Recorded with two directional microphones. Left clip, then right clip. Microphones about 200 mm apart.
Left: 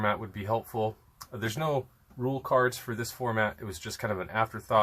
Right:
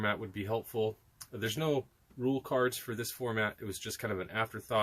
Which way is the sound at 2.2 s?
30° right (ahead or behind).